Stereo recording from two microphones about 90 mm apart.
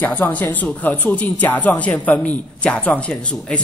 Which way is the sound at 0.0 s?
20° left (ahead or behind).